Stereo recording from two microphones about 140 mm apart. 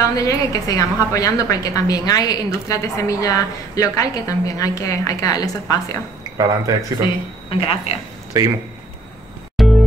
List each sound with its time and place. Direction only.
0.1 s a woman's voice: 25° left (ahead or behind)
6.3 s speech: 25° right (ahead or behind)
7.4 s speech: 45° left (ahead or behind)
8.3 s speech: 20° right (ahead or behind)
9.6 s music: centre (ahead or behind)